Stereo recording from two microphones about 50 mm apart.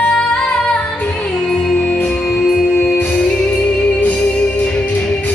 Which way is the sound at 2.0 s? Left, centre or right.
Left.